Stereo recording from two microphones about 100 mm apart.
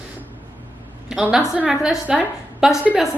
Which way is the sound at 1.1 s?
5° right (ahead or behind).